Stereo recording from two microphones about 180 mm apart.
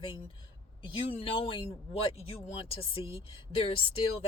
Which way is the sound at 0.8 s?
30° left (ahead or behind).